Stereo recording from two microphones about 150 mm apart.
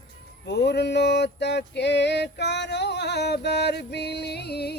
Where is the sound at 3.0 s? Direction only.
90° left.